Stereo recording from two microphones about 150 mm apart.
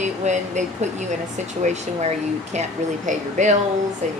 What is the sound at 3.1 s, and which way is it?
Speech, 55° right (ahead or behind).